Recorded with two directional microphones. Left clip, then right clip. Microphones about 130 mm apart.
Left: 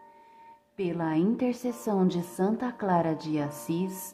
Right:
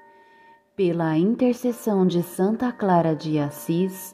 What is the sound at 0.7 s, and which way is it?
Speech, 45° right (ahead or behind).